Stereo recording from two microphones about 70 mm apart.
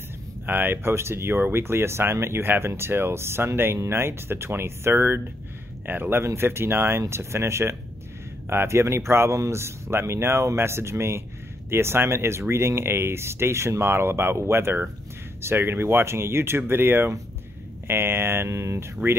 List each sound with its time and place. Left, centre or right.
0.5 s speech: right